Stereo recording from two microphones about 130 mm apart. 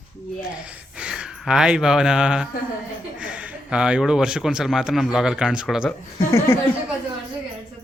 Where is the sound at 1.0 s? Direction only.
5° right (ahead or behind).